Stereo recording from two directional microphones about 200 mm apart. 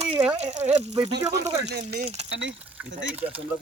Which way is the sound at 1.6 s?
55° right (ahead or behind).